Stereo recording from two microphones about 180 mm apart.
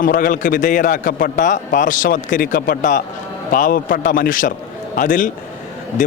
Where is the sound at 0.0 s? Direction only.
50° left (ahead or behind).